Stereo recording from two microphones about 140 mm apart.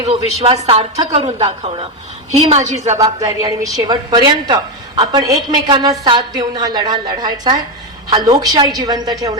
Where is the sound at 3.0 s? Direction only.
25° right (ahead or behind).